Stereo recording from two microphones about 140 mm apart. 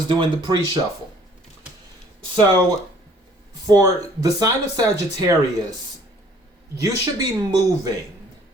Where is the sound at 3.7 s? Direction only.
25° right (ahead or behind).